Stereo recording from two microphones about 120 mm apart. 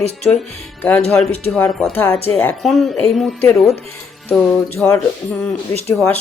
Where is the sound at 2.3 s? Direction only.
15° left (ahead or behind).